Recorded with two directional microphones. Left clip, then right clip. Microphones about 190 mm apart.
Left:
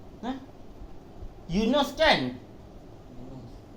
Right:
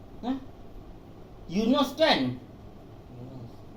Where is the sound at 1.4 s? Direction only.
50° left (ahead or behind).